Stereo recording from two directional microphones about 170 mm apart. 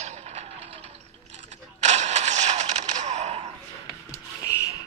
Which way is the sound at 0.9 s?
40° right (ahead or behind).